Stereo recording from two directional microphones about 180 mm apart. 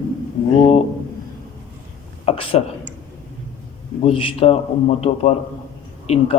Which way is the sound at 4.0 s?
30° left (ahead or behind).